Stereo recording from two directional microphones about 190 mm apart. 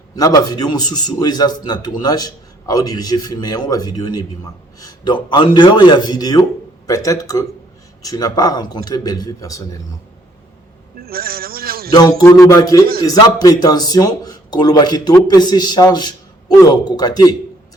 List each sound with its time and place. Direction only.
0.2 s a man's voice: 20° left (ahead or behind)
11.0 s a sound: 50° right (ahead or behind)
11.9 s a man's voice: 20° left (ahead or behind)